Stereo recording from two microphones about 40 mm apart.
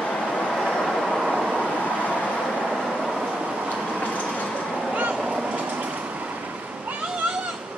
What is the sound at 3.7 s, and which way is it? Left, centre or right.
Train, left.